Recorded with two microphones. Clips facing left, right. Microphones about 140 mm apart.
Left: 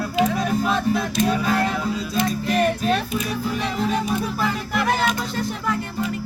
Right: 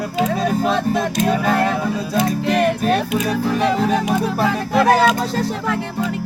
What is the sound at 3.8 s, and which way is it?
Speech, 75° right (ahead or behind).